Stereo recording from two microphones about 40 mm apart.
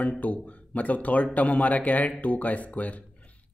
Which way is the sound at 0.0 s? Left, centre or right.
Left.